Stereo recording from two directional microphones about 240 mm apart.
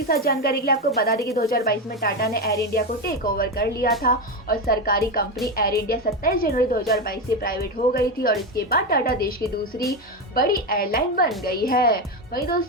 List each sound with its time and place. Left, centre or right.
0.1 s a woman's voice: left
10.3 s a woman's voice: left